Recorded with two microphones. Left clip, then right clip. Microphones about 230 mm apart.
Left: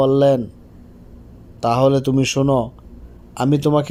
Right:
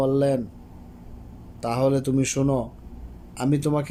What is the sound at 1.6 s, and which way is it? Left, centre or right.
Speech, left.